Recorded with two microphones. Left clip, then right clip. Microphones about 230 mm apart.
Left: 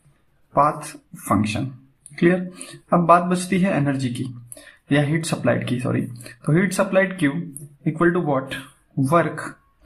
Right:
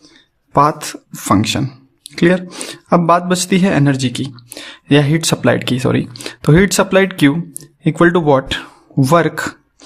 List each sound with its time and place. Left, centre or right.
0.5 s speech: right